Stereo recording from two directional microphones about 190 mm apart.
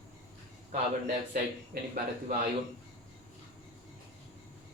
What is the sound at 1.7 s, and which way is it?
Speech, 55° right (ahead or behind).